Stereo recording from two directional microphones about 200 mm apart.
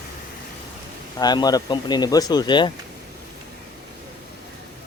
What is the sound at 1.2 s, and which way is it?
Speech, 20° left (ahead or behind).